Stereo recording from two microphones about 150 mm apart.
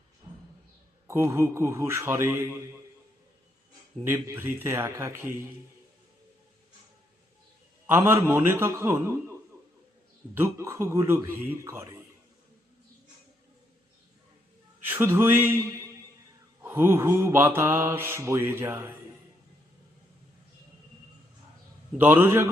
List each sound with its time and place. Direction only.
0.3 s a sound: 35° right (ahead or behind)
1.0 s mantra: 15° right (ahead or behind)
4.0 s mantra: 15° right (ahead or behind)
7.9 s mantra: 15° right (ahead or behind)
10.3 s mantra: 15° right (ahead or behind)
14.8 s mantra: 15° right (ahead or behind)
16.6 s mantra: 15° right (ahead or behind)
21.9 s mantra: 15° right (ahead or behind)